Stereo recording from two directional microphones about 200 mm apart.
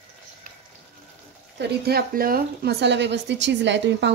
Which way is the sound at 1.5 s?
50° right (ahead or behind).